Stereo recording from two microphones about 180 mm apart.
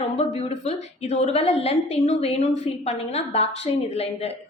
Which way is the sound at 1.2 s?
35° left (ahead or behind).